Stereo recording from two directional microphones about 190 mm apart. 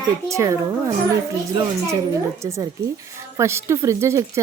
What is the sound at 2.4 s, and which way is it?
Speech, 15° right (ahead or behind).